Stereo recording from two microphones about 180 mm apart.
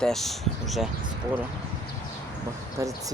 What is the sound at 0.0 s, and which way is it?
Speech, centre (ahead or behind).